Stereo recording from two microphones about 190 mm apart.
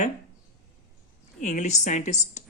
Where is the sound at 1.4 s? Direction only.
40° left (ahead or behind).